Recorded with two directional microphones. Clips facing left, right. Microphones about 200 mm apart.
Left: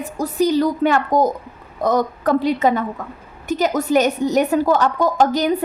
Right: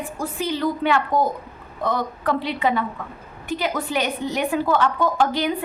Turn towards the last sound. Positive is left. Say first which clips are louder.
# left 5 dB
turn(degrees=40)  # may be behind; listen again after turning